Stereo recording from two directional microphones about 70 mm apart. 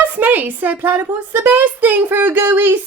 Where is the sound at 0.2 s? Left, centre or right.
Right.